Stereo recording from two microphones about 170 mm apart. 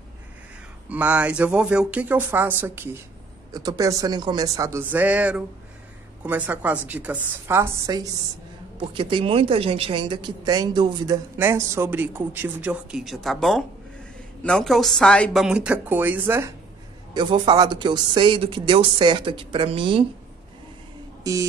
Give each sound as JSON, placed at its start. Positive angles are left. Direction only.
{"t": 0.8, "sound": "a woman's voice", "side_deg": -10}
{"t": 8.7, "sound": "a woman's voice", "side_deg": -30}
{"t": 17.1, "sound": "a woman's voice", "side_deg": -25}
{"t": 21.2, "sound": "speech", "side_deg": -20}